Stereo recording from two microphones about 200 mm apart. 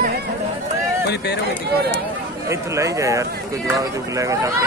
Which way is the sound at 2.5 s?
15° right (ahead or behind).